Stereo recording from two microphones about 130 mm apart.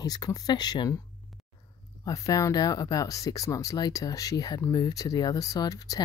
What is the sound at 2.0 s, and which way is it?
Speech, 25° left (ahead or behind).